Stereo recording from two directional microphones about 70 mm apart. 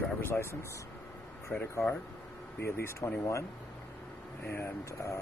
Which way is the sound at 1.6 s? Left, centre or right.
Left.